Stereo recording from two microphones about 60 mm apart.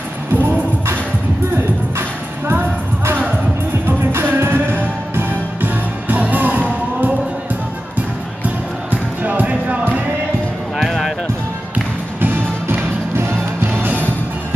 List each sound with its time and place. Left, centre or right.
0.3 s music: right
2.0 s music: right
3.8 s music: right
9.2 s music: right
10.8 s music: centre
11.7 s music: right
13.1 s music: right